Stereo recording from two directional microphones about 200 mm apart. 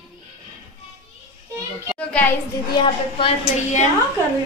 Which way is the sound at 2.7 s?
25° left (ahead or behind).